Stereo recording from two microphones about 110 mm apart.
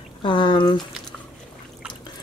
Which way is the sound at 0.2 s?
45° left (ahead or behind).